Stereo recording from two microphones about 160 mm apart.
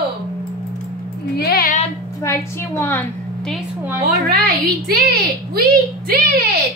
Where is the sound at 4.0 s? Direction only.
75° right (ahead or behind).